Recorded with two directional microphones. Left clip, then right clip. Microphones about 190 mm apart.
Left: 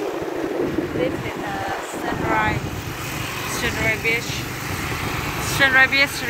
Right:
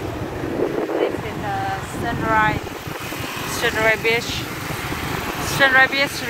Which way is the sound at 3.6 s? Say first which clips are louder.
Right 5 dB; 40° right (ahead or behind).